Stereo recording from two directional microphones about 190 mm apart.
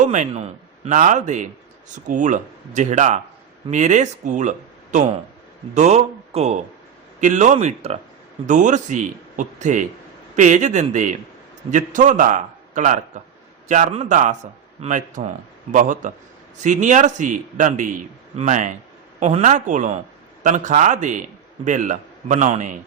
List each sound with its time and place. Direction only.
0.0 s a man's voice: 40° right (ahead or behind)